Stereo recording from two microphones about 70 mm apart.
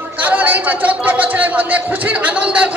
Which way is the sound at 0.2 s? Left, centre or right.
Right.